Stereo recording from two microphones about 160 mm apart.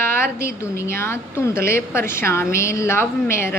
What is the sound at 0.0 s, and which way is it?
A woman's voice, 15° left (ahead or behind).